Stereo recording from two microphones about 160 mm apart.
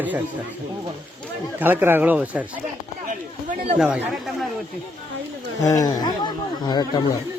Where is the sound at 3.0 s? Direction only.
55° right (ahead or behind).